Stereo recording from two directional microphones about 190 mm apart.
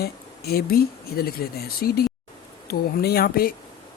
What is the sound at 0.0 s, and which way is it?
Speech, 55° left (ahead or behind).